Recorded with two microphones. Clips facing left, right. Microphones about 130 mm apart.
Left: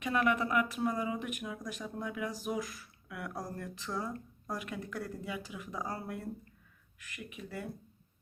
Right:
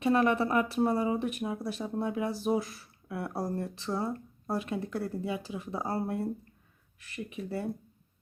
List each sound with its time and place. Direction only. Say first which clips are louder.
0.0 s speech: right 5 dB; 35° right (ahead or behind)